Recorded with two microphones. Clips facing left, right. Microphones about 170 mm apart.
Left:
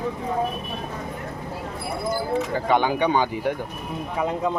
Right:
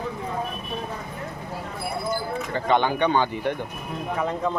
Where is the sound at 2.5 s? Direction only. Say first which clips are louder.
Right 2 dB; 10° left (ahead or behind).